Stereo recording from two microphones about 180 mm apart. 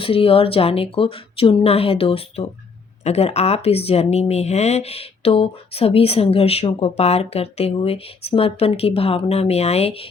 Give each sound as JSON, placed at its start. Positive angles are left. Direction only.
{"t": 0.0, "sound": "speech", "side_deg": 30}